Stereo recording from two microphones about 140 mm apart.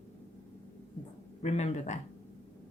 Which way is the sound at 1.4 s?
50° left (ahead or behind).